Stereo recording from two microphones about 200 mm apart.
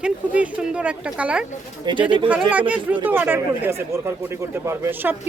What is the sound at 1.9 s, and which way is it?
Speech, 20° right (ahead or behind).